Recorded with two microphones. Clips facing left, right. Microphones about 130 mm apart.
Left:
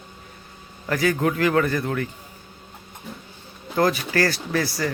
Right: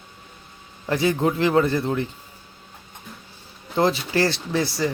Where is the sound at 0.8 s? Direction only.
25° right (ahead or behind).